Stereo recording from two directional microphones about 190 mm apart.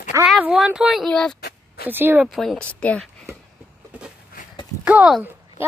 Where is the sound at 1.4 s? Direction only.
55° left (ahead or behind).